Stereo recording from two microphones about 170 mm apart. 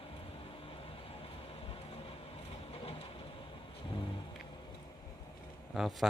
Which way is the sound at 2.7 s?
35° left (ahead or behind).